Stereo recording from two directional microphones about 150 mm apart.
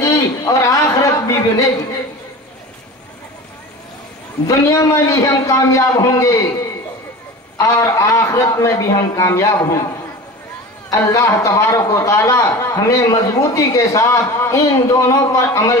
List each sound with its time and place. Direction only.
0.0 s a sound: 20° left (ahead or behind)
4.5 s a man's voice: 25° left (ahead or behind)
7.5 s a man's voice: 20° left (ahead or behind)
10.9 s a man's voice: 20° left (ahead or behind)